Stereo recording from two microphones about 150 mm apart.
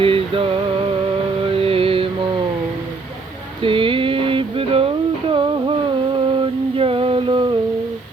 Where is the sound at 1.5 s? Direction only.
40° right (ahead or behind).